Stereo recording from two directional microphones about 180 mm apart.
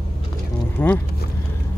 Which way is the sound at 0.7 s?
10° left (ahead or behind).